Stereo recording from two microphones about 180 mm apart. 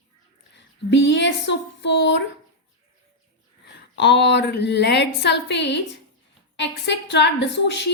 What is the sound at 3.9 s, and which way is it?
A woman's voice, 70° left (ahead or behind).